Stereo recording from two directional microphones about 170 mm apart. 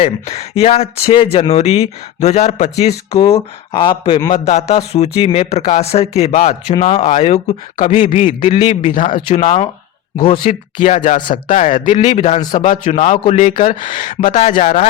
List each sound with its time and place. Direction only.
0.0 s speech: 40° left (ahead or behind)
4.7 s speech: 35° left (ahead or behind)
8.4 s a man's voice: 25° left (ahead or behind)
8.6 s speech: 40° left (ahead or behind)
10.2 s a man's voice: 30° left (ahead or behind)
10.5 s speech: 45° left (ahead or behind)
12.5 s speech: 50° left (ahead or behind)
13.2 s speech: 40° left (ahead or behind)
13.5 s speech: 55° left (ahead or behind)